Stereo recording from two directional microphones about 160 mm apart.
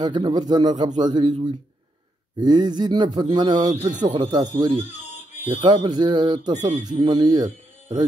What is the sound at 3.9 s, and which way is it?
Speech, 50° right (ahead or behind).